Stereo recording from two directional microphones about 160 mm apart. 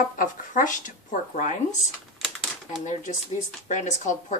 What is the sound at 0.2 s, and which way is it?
A woman's voice, 55° left (ahead or behind).